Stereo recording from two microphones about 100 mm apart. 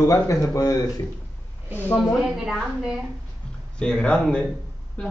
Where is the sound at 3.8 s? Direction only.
10° left (ahead or behind).